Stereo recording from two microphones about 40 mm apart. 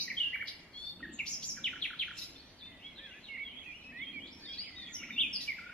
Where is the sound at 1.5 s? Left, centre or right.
Centre.